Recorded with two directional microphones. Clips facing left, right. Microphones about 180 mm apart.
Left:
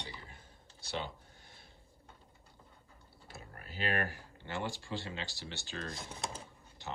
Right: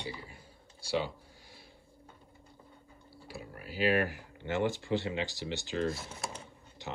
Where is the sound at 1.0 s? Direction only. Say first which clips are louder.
Right 6 dB; 55° left (ahead or behind).